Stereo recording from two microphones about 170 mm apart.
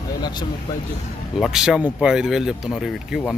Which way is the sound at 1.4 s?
Centre (ahead or behind).